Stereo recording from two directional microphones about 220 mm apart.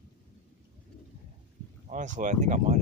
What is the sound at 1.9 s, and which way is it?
Speech, 35° right (ahead or behind).